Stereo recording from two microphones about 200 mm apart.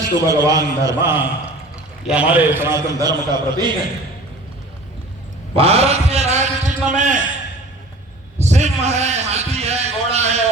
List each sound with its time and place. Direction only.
0.2 s a man's voice: 15° right (ahead or behind)
5.5 s a sound: 30° right (ahead or behind)
8.4 s a man's voice: 35° right (ahead or behind)